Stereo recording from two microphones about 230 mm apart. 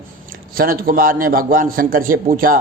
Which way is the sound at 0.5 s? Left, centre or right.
Right.